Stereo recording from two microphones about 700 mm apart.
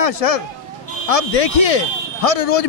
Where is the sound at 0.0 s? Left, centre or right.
Left.